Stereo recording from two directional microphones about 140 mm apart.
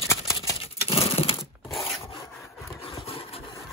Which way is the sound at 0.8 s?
45° left (ahead or behind).